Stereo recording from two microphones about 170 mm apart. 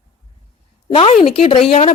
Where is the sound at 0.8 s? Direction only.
35° left (ahead or behind).